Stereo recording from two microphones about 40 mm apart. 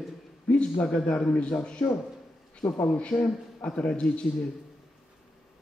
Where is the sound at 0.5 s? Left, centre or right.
Left.